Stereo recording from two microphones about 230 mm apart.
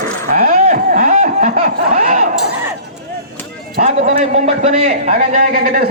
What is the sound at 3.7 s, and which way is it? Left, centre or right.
A man's voice, right.